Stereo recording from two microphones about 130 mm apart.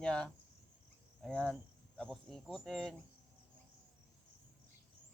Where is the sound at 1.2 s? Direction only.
5° left (ahead or behind).